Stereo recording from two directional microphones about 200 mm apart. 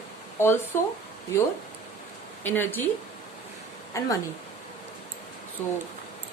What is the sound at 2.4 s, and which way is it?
Speech, 10° left (ahead or behind).